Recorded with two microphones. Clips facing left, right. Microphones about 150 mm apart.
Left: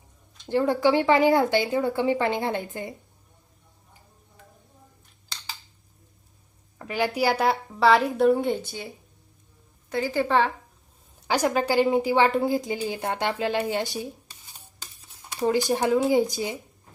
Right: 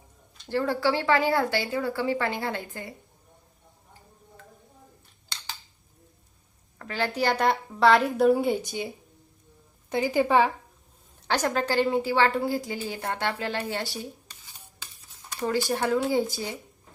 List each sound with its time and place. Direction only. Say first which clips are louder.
0.4 s speech: left 4 dB; 20° left (ahead or behind)
6.7 s a woman's voice: left 3 dB; 15° left (ahead or behind); by 8.9 s 15° right (ahead or behind)
9.9 s a woman's voice: right 1 dB; 15° right (ahead or behind)
11.3 s a woman's voice: left 3 dB; 10° left (ahead or behind)
15.4 s a woman's voice: left 3 dB; 20° left (ahead or behind)